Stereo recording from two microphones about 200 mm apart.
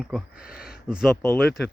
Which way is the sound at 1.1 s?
10° left (ahead or behind).